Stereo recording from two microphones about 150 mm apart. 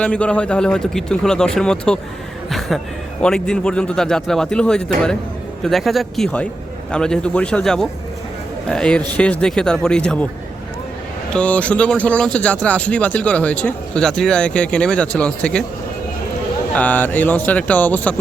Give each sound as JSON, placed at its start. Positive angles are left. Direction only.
{"t": 0.0, "sound": "a man's voice", "side_deg": 5}
{"t": 11.3, "sound": "speech", "side_deg": 10}
{"t": 16.7, "sound": "speech", "side_deg": 10}